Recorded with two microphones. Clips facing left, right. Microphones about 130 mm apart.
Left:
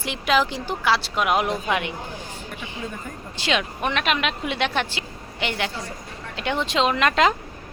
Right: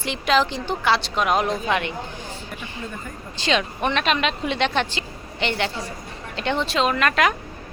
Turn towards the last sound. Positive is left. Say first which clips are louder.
# left 1 dB
turn(degrees=25)  # may be behind; listen again after turning